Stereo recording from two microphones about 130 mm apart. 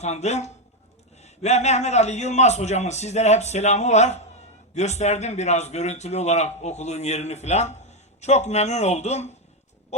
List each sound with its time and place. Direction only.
0.0 s a man's voice: 60° left (ahead or behind)